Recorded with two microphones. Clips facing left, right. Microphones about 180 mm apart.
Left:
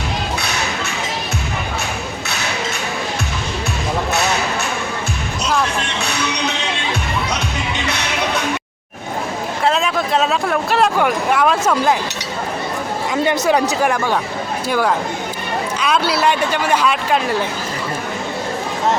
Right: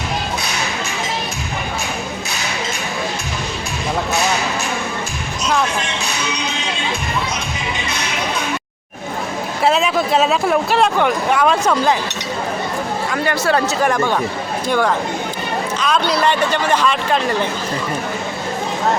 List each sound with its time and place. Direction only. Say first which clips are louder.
6.0 s music: left 2 dB; 65° left (ahead or behind)
9.6 s speech: right 2 dB; 5° right (ahead or behind)
13.2 s speech: left 2 dB; 20° left (ahead or behind)